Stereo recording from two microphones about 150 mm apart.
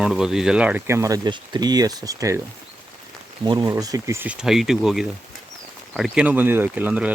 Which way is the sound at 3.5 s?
30° right (ahead or behind).